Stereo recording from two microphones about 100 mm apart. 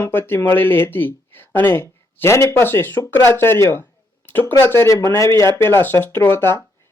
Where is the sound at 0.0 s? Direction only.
20° left (ahead or behind).